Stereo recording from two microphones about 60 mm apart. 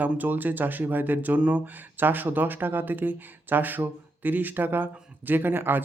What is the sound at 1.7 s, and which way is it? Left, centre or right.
Speech, right.